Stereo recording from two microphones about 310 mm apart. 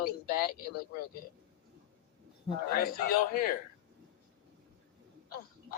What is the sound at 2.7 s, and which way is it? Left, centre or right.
Speech, left.